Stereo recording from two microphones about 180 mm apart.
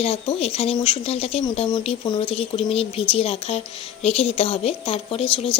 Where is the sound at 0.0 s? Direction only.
35° left (ahead or behind).